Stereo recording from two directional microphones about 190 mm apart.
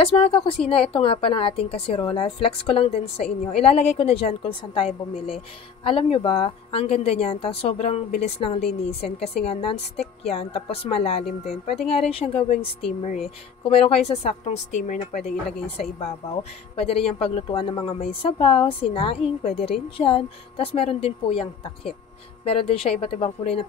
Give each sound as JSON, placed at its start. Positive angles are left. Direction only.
{"t": 0.0, "sound": "a woman's voice", "side_deg": 30}
{"t": 13.7, "sound": "a woman's voice", "side_deg": 30}